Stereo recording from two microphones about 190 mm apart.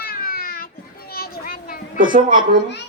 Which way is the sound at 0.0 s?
50° left (ahead or behind).